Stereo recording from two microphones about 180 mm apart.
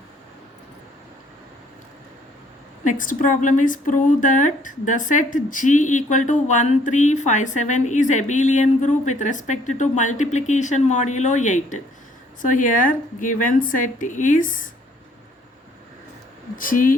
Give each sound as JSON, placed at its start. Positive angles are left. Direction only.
{"t": 2.8, "sound": "speech", "side_deg": 45}
{"t": 16.6, "sound": "speech", "side_deg": 50}